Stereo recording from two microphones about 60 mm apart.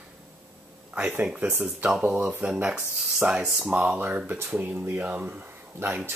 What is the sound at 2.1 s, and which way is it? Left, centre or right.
Speech, right.